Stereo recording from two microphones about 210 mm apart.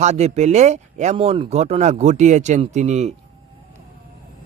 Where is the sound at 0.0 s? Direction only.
30° right (ahead or behind).